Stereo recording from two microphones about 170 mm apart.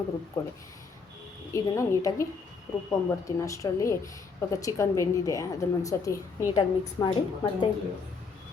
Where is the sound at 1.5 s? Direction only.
20° left (ahead or behind).